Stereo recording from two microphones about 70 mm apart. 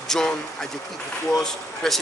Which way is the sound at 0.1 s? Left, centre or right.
Centre.